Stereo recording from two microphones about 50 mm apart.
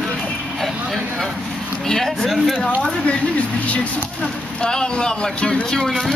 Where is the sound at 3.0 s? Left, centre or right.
Left; by 6.2 s centre.